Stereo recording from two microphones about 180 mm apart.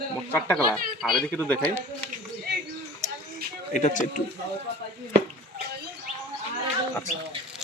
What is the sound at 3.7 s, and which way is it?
Speech, 45° left (ahead or behind).